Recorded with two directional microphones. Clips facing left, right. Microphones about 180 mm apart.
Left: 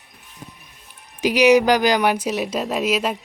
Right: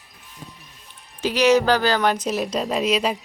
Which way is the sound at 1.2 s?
15° left (ahead or behind).